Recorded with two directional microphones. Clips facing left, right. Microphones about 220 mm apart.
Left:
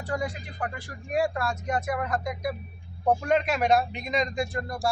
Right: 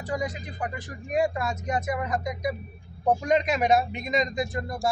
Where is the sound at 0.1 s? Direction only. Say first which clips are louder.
Right 1 dB; 10° right (ahead or behind).